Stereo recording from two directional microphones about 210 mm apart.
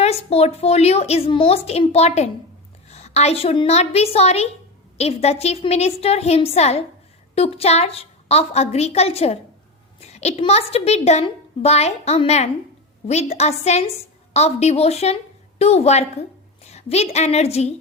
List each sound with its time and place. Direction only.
0.0 s a woman's voice: 30° left (ahead or behind)